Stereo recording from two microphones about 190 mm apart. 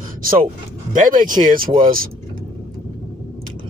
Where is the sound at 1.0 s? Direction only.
45° right (ahead or behind).